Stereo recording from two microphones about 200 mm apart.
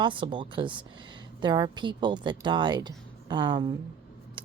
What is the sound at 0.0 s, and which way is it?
Speech, 25° right (ahead or behind).